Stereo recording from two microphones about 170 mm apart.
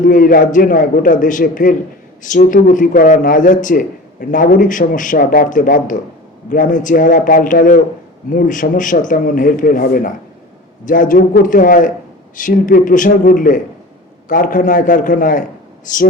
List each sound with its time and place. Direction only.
0.0 s a man's voice: 50° left (ahead or behind)